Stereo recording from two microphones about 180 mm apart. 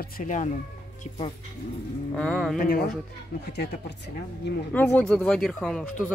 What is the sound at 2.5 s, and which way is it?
Speech, 55° left (ahead or behind).